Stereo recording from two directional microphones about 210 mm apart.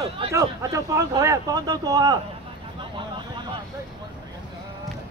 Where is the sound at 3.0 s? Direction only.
20° right (ahead or behind).